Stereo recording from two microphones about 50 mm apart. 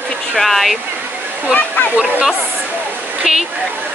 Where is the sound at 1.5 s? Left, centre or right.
Left.